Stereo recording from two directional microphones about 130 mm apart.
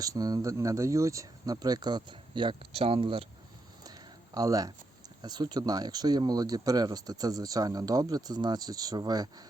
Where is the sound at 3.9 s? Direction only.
30° right (ahead or behind).